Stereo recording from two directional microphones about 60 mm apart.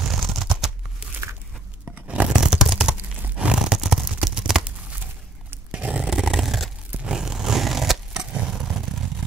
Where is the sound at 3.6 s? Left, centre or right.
Centre.